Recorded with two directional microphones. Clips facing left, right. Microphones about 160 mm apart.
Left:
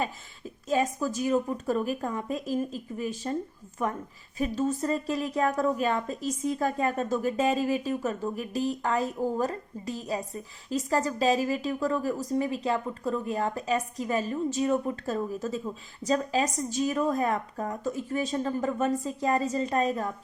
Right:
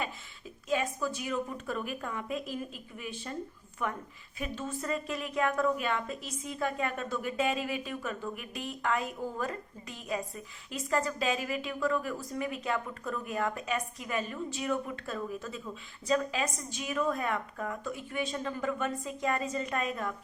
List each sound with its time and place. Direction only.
0.7 s speech: 40° left (ahead or behind)